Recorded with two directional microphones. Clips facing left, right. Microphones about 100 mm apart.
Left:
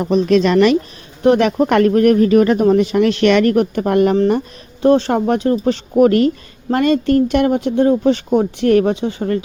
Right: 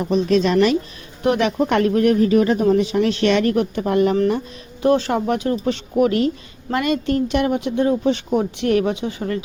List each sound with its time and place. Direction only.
0.0 s a woman's voice: 65° left (ahead or behind)
1.2 s speech: 40° left (ahead or behind)
1.6 s speech: 50° left (ahead or behind)
4.8 s speech: 35° left (ahead or behind)
6.1 s speech: 50° left (ahead or behind)
6.7 s speech: 40° left (ahead or behind)